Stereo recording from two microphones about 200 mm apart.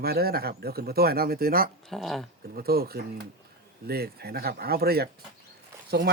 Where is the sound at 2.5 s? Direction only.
50° right (ahead or behind).